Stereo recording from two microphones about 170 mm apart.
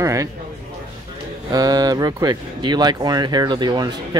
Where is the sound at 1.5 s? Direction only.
20° right (ahead or behind).